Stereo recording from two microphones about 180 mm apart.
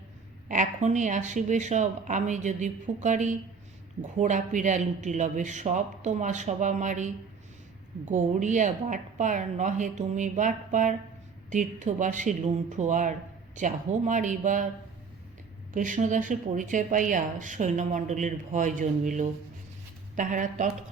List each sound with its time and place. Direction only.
0.4 s speech: 45° right (ahead or behind)
15.7 s speech: 45° right (ahead or behind)